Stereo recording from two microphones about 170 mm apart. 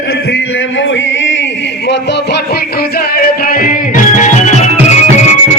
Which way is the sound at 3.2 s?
55° left (ahead or behind).